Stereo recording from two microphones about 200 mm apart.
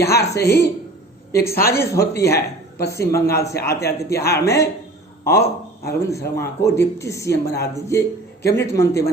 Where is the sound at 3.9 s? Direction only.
55° left (ahead or behind).